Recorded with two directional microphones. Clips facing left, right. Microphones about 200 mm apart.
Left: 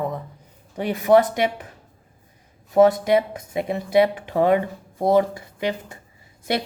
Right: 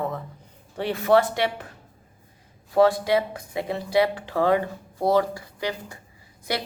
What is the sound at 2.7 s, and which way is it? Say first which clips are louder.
Speech: left 3 dB; 20° left (ahead or behind).